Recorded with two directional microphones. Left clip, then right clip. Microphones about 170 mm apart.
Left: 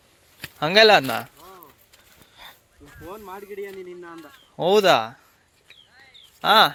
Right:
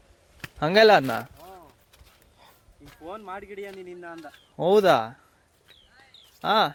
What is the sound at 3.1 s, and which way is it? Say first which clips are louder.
Speech: even; 20° right (ahead or behind).